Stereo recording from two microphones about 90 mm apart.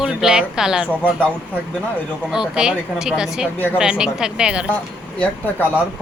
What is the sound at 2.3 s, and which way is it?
Speech, 10° right (ahead or behind).